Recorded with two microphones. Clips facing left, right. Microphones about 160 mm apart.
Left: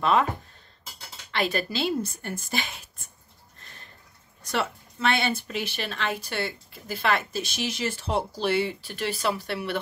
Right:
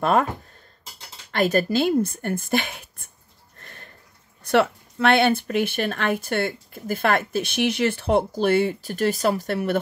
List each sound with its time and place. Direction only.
0.0 s speech: 50° right (ahead or behind)
1.3 s speech: 45° right (ahead or behind)
3.5 s a sound: 55° right (ahead or behind)
4.4 s speech: 60° right (ahead or behind); by 9.8 s 45° right (ahead or behind)